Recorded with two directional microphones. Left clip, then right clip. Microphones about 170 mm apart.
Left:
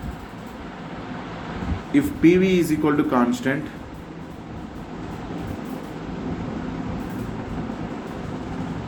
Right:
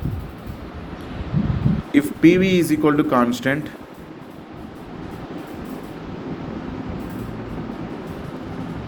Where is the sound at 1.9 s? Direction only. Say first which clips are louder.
Right 2 dB; 45° right (ahead or behind).